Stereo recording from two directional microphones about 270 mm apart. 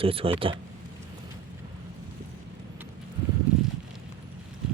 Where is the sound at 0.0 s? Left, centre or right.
Right.